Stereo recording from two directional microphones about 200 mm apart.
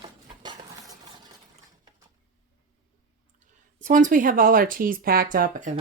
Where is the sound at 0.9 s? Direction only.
20° right (ahead or behind).